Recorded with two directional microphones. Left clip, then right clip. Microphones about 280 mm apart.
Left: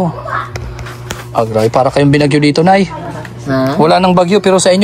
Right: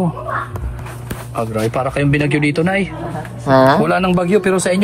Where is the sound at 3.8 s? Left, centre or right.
Centre.